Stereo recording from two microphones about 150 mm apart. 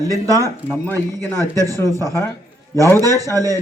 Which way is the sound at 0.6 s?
15° left (ahead or behind).